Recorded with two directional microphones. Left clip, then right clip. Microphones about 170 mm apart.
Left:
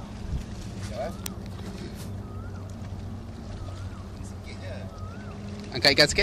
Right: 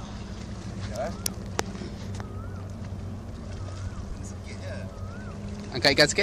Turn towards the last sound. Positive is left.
turn(degrees=0)  # may be behind; listen again after turning